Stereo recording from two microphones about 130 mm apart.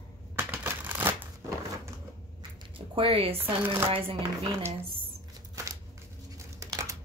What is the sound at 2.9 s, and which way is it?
Speech, 45° right (ahead or behind).